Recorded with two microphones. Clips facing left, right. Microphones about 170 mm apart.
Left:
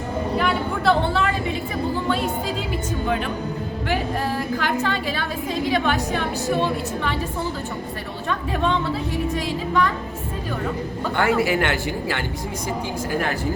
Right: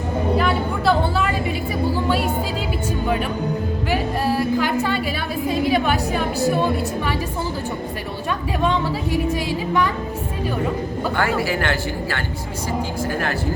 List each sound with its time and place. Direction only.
0.3 s a sound: centre (ahead or behind)
3.8 s music: 5° right (ahead or behind)
4.8 s a woman's voice: 10° right (ahead or behind)
11.2 s speech: 20° left (ahead or behind)